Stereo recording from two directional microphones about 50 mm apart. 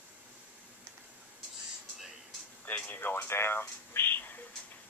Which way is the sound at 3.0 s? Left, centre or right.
Left.